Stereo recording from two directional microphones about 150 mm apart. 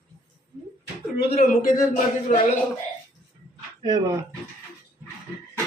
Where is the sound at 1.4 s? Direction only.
65° left (ahead or behind).